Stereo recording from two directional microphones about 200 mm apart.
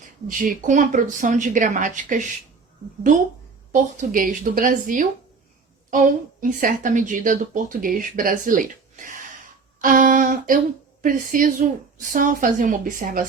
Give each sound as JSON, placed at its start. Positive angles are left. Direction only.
{"t": 0.3, "sound": "speech", "side_deg": -40}
{"t": 3.7, "sound": "speech", "side_deg": -40}
{"t": 6.4, "sound": "speech", "side_deg": -40}